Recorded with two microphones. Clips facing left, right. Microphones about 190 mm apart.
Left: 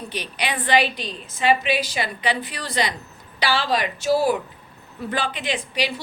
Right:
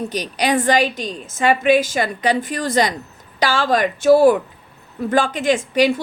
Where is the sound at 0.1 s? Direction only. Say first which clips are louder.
Right 7 dB; 40° right (ahead or behind).